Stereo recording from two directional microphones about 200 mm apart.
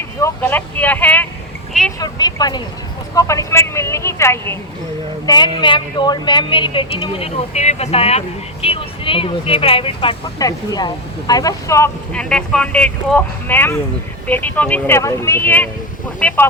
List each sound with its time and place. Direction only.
0.2 s speech: 10° left (ahead or behind)
2.0 s speech: 20° left (ahead or behind)